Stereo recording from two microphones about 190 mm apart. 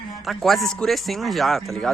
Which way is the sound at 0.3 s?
Centre (ahead or behind).